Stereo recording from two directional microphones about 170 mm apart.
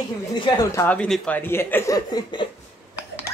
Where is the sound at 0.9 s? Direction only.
5° left (ahead or behind); by 2.4 s 20° left (ahead or behind).